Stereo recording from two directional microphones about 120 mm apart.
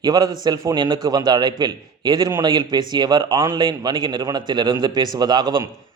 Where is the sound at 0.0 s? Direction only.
35° right (ahead or behind).